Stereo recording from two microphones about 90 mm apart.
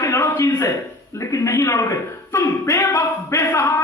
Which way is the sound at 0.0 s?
30° left (ahead or behind).